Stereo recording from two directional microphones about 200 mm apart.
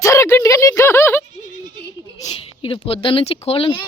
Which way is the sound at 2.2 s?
25° left (ahead or behind).